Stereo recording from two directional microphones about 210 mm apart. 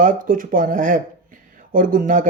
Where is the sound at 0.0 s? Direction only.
40° right (ahead or behind).